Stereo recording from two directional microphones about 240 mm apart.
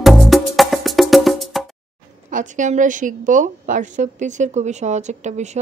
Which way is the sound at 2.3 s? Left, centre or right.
Right.